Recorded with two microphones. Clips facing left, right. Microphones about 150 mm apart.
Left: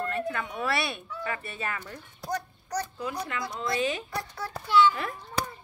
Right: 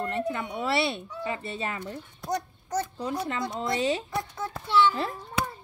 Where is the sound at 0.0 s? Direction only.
20° right (ahead or behind).